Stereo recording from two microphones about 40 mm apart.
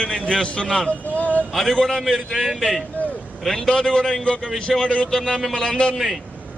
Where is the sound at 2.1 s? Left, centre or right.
Centre.